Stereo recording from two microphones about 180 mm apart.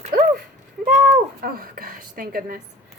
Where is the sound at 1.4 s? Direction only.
55° right (ahead or behind).